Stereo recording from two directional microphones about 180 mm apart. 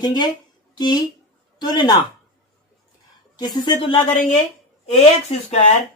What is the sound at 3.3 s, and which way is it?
Speech, 20° left (ahead or behind).